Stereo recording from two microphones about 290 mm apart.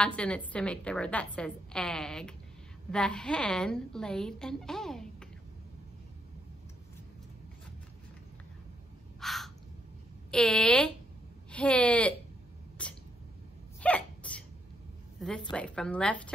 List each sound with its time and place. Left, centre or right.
0.0 s a woman's voice: centre
9.2 s bird: centre
10.3 s a woman's voice: centre
13.7 s sneeze: centre
15.1 s a woman's voice: centre